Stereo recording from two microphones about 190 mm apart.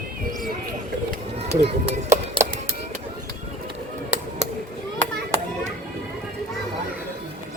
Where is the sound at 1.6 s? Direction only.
35° right (ahead or behind).